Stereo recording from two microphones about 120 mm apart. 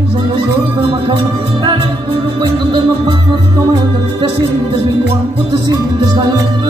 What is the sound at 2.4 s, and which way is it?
Music, 40° right (ahead or behind).